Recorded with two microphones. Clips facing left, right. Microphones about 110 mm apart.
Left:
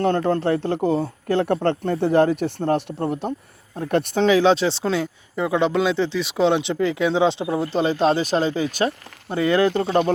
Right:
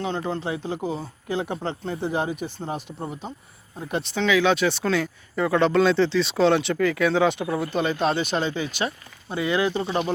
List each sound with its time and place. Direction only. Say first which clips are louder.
0.0 s speech: left 8 dB; 60° left (ahead or behind)
3.8 s speech: left 6 dB; 50° left (ahead or behind)